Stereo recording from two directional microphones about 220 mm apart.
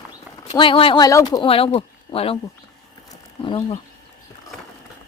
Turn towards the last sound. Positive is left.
turn(degrees=25)  # may be behind; listen again after turning